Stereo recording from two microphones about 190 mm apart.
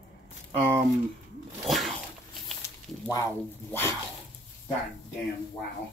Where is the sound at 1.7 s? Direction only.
Centre (ahead or behind).